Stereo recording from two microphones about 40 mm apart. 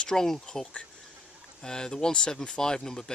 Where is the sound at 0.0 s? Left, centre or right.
Centre.